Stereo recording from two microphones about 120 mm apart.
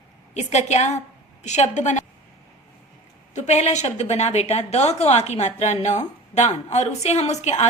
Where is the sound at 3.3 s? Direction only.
70° left (ahead or behind).